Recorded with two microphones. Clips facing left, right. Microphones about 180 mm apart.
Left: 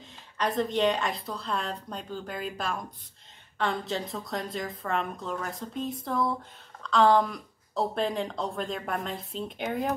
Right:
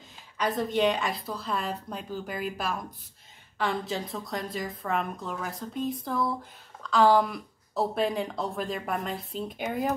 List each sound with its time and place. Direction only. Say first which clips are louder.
0.4 s speech: even; centre (ahead or behind)